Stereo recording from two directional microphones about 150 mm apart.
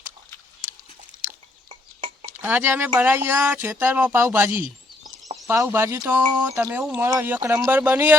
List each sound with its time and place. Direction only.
2.4 s speech: 15° right (ahead or behind)